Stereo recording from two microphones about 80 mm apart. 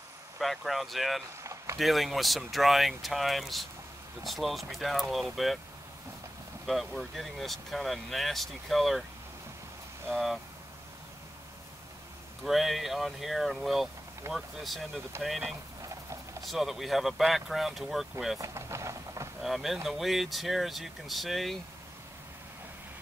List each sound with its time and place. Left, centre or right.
0.4 s speech: centre
1.4 s a sound: right
1.8 s speech: centre
6.6 s speech: centre
10.1 s speech: centre
12.4 s speech: centre
15.1 s speech: right
15.8 s rodents: right
16.4 s speech: centre
18.4 s speech: right
19.4 s speech: centre